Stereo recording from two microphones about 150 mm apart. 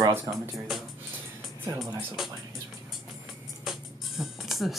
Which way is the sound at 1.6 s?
20° right (ahead or behind).